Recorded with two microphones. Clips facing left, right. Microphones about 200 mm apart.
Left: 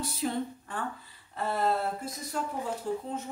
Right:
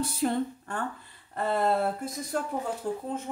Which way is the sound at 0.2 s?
55° right (ahead or behind).